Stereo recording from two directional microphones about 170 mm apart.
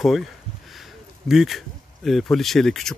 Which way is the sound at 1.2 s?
Centre (ahead or behind).